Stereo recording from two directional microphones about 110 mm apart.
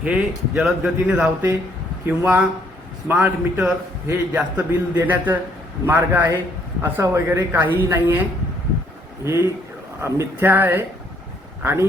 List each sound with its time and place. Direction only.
0.0 s a man's voice: 10° right (ahead or behind)
1.1 s a woman's voice: 20° right (ahead or behind)